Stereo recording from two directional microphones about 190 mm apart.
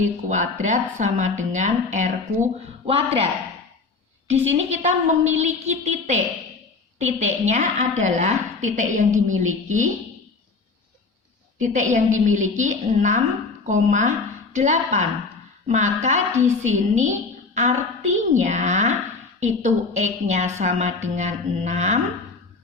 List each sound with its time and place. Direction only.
0.3 s a woman's voice: 40° right (ahead or behind)
4.3 s a woman's voice: 35° right (ahead or behind)
11.6 s a woman's voice: 40° right (ahead or behind)